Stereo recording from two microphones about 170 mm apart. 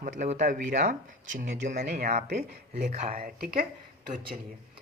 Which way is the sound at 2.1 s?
65° right (ahead or behind).